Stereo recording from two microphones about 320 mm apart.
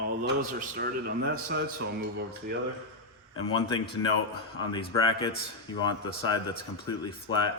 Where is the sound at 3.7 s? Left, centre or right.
Left.